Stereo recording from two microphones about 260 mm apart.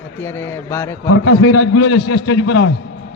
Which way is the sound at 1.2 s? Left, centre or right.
Left.